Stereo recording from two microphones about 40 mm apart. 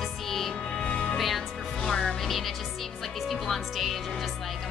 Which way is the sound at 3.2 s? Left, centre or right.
Centre.